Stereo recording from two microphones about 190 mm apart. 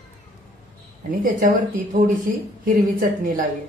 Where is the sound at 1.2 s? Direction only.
45° right (ahead or behind).